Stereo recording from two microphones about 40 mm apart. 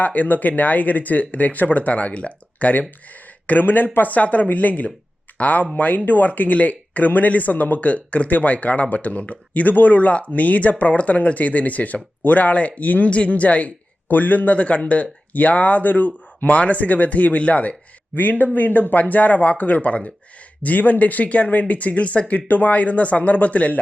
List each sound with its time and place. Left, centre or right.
0.0 s speech: left
14.1 s speech: left
18.1 s speech: left